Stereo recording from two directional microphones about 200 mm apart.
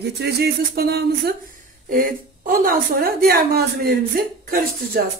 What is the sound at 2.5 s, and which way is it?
Speech, 45° right (ahead or behind).